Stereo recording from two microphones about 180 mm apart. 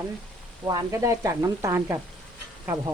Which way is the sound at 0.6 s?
20° right (ahead or behind).